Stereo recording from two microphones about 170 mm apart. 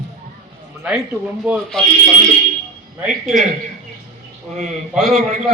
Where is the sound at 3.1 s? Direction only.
50° right (ahead or behind).